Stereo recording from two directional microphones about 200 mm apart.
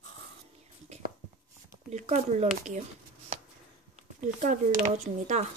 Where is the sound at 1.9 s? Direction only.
35° right (ahead or behind).